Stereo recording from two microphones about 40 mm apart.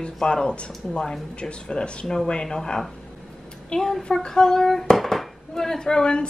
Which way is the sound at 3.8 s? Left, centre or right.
Centre.